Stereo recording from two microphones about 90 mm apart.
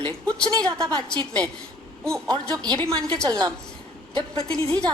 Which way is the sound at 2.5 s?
45° right (ahead or behind).